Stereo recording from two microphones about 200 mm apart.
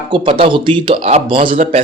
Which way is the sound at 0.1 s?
25° right (ahead or behind).